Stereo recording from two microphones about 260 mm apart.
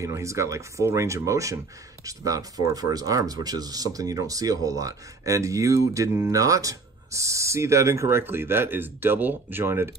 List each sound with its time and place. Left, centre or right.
0.0 s speech: centre